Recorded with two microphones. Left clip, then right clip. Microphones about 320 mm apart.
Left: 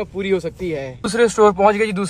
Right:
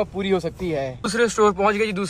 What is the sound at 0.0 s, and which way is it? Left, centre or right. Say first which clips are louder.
A man's voice: left 2 dB; centre.